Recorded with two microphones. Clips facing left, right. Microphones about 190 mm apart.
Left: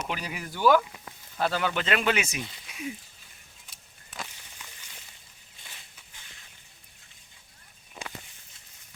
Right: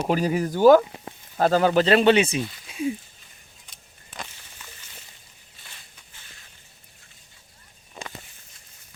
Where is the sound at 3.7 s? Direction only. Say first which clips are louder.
Right 2 dB; centre (ahead or behind).